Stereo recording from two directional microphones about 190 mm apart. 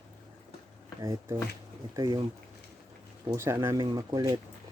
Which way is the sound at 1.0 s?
15° right (ahead or behind).